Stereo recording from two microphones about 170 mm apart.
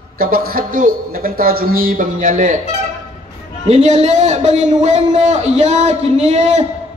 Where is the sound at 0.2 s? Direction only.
60° right (ahead or behind).